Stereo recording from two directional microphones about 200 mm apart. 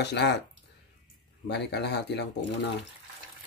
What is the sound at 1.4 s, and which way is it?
Speech, 60° left (ahead or behind).